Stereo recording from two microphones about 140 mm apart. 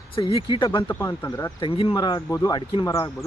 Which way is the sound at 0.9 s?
15° left (ahead or behind).